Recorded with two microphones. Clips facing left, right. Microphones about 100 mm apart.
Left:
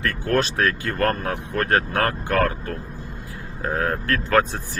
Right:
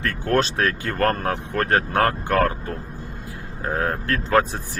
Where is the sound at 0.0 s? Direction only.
25° right (ahead or behind).